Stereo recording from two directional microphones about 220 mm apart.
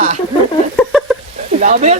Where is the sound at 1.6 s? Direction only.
35° right (ahead or behind).